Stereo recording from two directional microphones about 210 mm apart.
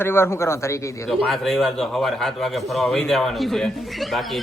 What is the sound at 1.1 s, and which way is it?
A man's voice, centre (ahead or behind).